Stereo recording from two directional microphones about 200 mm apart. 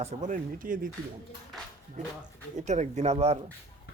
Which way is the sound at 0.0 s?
35° right (ahead or behind).